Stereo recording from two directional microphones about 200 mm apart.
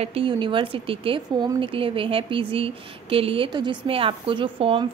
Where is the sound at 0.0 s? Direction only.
25° right (ahead or behind).